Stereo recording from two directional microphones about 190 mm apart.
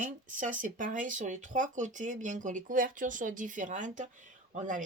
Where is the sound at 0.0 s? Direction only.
45° right (ahead or behind).